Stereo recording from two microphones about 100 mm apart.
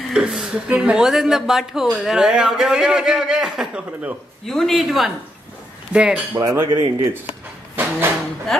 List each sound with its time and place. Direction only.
0.1 s speech: 5° right (ahead or behind)
6.4 s cutlery: 25° right (ahead or behind)
6.7 s speech: 55° right (ahead or behind)
7.1 s drawer open or close: 20° right (ahead or behind)